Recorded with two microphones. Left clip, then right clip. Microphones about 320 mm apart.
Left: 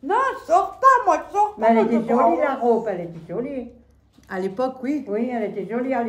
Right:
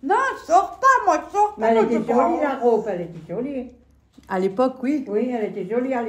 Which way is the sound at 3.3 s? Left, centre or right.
Left.